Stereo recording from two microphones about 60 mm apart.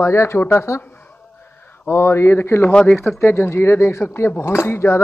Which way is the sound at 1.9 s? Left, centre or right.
Left.